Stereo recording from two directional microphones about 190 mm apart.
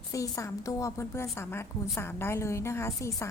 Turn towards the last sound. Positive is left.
turn(degrees=15)  # may be behind; listen again after turning